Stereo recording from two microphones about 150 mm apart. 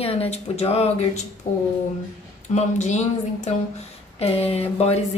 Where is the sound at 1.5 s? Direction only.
55° left (ahead or behind).